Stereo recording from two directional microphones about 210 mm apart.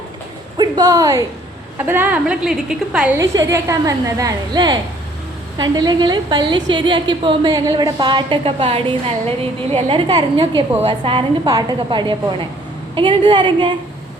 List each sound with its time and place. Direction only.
0.5 s a woman's voice: 20° right (ahead or behind); by 3.1 s 5° right (ahead or behind)
3.2 s a woman's voice: 15° right (ahead or behind)